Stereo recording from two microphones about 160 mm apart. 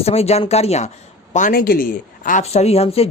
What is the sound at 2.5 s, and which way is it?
Speech, 40° left (ahead or behind).